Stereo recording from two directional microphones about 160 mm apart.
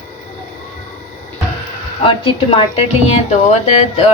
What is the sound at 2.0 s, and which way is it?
A woman's voice, 30° left (ahead or behind).